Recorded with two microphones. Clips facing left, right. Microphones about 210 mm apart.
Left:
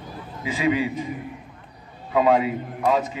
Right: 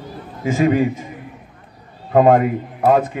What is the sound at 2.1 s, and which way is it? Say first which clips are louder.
A man's voice: right 6 dB; 50° right (ahead or behind).